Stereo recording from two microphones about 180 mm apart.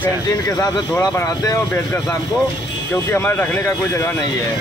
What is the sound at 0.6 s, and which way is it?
Speech, 15° left (ahead or behind).